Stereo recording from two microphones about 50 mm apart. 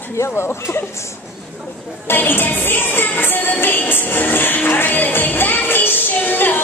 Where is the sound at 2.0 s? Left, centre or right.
Left.